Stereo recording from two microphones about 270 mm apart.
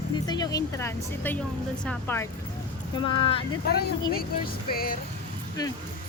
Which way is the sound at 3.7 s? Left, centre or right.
Left.